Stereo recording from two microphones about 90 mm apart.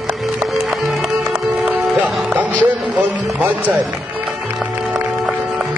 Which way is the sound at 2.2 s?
15° right (ahead or behind).